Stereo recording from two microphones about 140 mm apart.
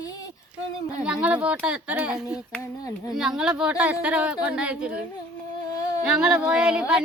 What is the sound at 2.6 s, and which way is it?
Speech, 20° left (ahead or behind).